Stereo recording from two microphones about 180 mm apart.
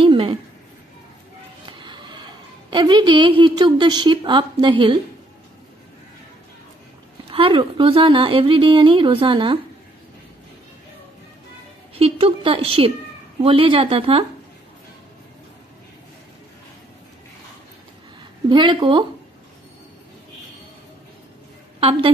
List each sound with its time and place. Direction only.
0.0 s a sound: 30° right (ahead or behind)
1.7 s a sound: 25° right (ahead or behind)
2.7 s a woman's voice: 25° right (ahead or behind)
7.2 s a woman's voice: 30° right (ahead or behind)
11.9 s a woman's voice: 30° right (ahead or behind)
18.5 s a woman's voice: 25° right (ahead or behind)
21.7 s a woman's voice: 30° right (ahead or behind)